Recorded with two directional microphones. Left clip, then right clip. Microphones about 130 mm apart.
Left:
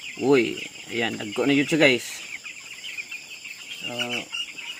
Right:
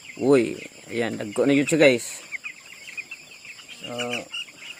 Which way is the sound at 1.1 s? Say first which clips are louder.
Right 3 dB; 90° right.